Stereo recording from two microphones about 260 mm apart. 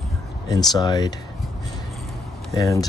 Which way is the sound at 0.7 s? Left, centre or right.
Centre.